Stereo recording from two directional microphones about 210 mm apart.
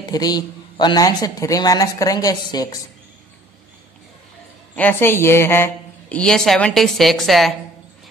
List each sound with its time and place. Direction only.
0.1 s a man's voice: 20° left (ahead or behind)
4.7 s a woman's voice: 10° left (ahead or behind)